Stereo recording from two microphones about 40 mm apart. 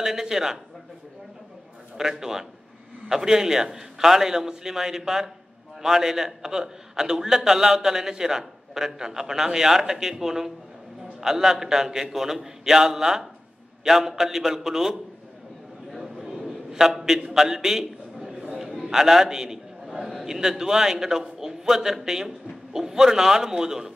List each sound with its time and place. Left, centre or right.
0.0 s a man's voice: centre
2.0 s a man's voice: centre
15.9 s a sound: centre
17.3 s a man's voice: centre
18.4 s a sound: centre
18.8 s a man's voice: centre